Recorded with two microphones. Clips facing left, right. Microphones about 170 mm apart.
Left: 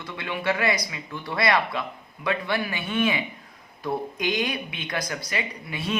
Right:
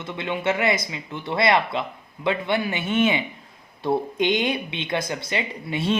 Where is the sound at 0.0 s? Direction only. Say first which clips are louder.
Right 3 dB; 20° right (ahead or behind).